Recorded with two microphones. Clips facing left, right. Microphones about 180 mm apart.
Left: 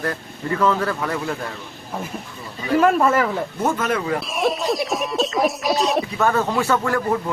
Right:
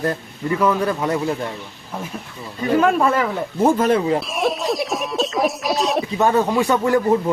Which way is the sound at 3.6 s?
30° right (ahead or behind).